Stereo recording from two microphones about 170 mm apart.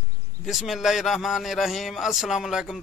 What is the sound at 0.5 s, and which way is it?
Speech, centre (ahead or behind).